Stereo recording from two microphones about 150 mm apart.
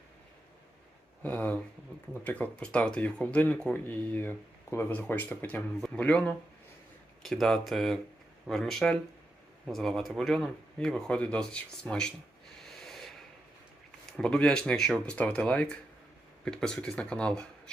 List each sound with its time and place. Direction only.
1.2 s speech: 10° left (ahead or behind)
12.6 s snort: centre (ahead or behind)
14.1 s speech: 5° left (ahead or behind)